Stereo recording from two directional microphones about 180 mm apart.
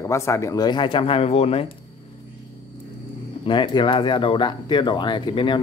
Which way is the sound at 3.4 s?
25° left (ahead or behind).